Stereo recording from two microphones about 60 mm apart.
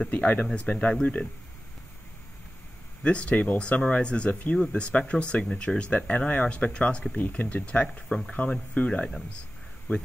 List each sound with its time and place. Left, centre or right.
0.0 s speech: left
3.0 s speech: centre